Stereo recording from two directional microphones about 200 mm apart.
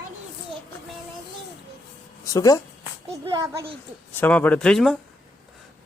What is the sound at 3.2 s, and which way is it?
Speech, 25° right (ahead or behind).